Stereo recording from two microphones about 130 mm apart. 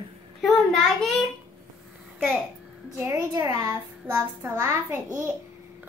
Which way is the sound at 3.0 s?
20° right (ahead or behind).